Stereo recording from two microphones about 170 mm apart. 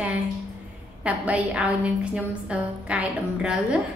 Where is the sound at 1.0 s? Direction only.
10° right (ahead or behind).